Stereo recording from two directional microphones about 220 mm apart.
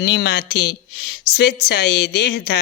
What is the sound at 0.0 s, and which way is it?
Speech, 50° left (ahead or behind).